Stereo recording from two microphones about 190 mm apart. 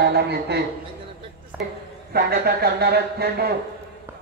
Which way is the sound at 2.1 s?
55° right (ahead or behind).